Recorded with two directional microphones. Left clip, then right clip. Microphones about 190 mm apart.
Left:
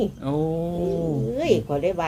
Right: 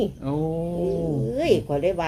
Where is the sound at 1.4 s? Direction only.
Centre (ahead or behind).